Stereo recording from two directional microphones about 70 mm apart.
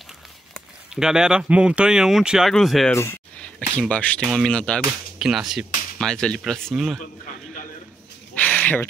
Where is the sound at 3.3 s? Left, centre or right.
Centre.